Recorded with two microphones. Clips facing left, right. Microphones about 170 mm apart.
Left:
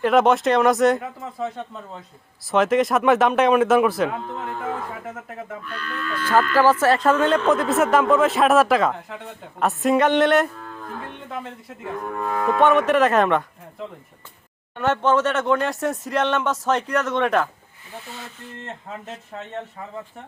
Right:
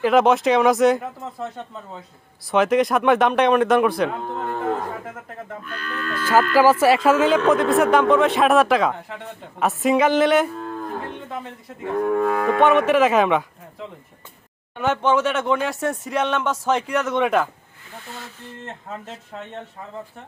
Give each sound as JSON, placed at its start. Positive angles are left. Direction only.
{"t": 0.0, "sound": "speech", "side_deg": 0}
{"t": 5.6, "sound": "speech", "side_deg": -45}
{"t": 6.5, "sound": "speech", "side_deg": -10}
{"t": 11.8, "sound": "cattle", "side_deg": -65}
{"t": 12.5, "sound": "speech", "side_deg": 0}